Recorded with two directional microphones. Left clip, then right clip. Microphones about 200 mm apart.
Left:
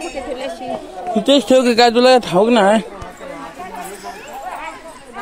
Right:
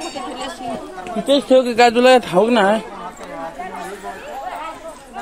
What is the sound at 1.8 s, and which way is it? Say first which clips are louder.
Speech: even; 20° left (ahead or behind).